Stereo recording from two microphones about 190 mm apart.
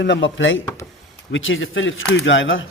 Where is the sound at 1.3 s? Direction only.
90° left.